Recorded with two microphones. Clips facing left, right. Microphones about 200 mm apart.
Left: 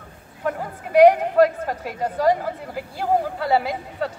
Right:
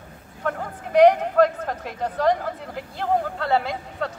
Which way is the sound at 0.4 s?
10° left (ahead or behind).